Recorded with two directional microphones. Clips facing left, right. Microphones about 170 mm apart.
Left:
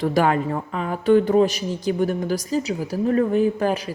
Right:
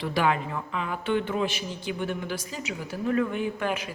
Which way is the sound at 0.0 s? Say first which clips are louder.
Left 6 dB; 45° left (ahead or behind).